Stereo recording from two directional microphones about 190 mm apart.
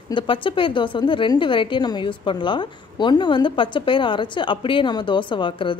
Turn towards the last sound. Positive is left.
turn(degrees=25)  # may be behind; listen again after turning